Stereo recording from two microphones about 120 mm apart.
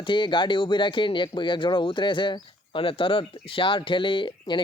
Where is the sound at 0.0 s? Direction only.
45° left (ahead or behind).